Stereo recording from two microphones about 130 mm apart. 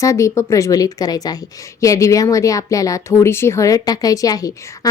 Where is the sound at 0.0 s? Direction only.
25° left (ahead or behind).